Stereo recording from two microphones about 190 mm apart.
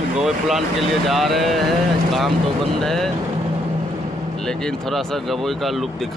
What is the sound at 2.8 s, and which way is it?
Speech, centre (ahead or behind).